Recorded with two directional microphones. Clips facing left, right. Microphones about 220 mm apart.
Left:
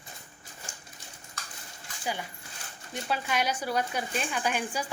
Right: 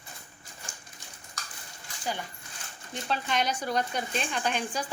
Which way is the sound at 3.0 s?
10° left (ahead or behind).